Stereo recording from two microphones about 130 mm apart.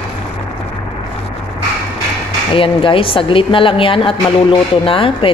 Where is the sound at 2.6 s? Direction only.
45° left (ahead or behind).